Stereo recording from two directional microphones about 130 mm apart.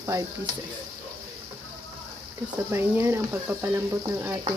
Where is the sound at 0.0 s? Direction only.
25° right (ahead or behind).